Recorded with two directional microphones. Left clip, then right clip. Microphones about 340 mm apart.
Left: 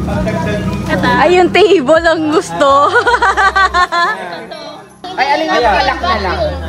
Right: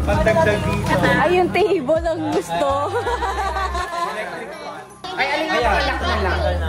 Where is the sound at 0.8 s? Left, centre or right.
Left.